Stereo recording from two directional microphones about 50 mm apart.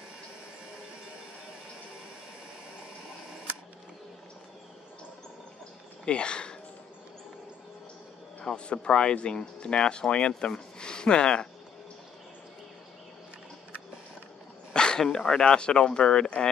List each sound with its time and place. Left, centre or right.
6.0 s speech: centre
8.5 s speech: left
14.7 s a sound: centre
15.1 s speech: centre